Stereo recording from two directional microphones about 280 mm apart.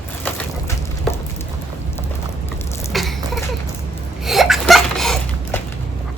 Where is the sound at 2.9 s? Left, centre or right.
Centre.